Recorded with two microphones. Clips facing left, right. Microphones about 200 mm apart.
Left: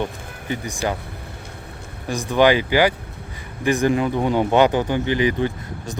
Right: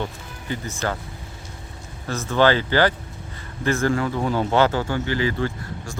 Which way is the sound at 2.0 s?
15° left (ahead or behind).